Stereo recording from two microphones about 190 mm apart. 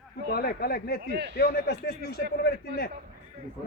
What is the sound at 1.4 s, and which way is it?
Speech, 55° left (ahead or behind).